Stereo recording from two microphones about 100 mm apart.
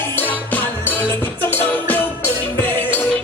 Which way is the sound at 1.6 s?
20° left (ahead or behind).